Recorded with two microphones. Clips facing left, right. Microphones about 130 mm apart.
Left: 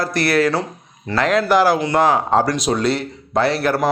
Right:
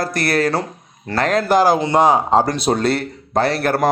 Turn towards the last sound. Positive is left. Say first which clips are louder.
# even
turn(degrees=-50)  # may be behind; listen again after turning